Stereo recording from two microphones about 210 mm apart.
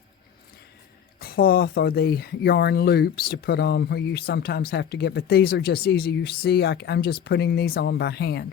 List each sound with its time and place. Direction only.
1.2 s speech: 45° left (ahead or behind)